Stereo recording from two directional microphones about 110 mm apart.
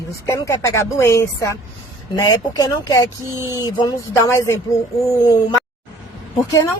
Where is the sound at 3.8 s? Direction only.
30° left (ahead or behind).